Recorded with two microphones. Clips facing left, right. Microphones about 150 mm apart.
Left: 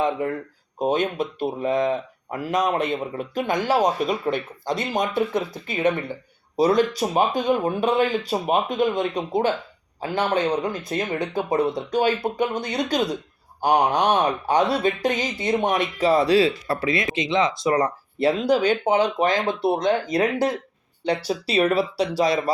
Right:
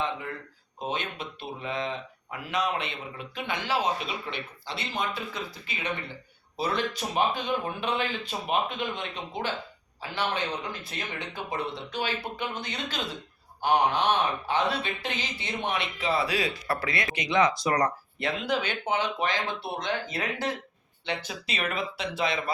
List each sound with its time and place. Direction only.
0.8 s speech: 45° left (ahead or behind)
13.6 s speech: 40° left (ahead or behind); by 18.3 s 25° left (ahead or behind)
18.3 s speech: 35° left (ahead or behind)